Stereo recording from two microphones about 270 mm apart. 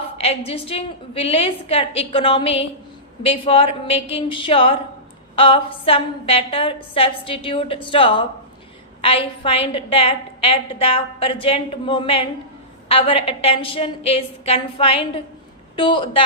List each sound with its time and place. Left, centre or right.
0.2 s a woman's voice: left